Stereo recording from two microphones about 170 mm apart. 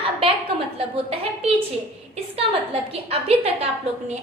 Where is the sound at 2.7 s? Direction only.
35° right (ahead or behind).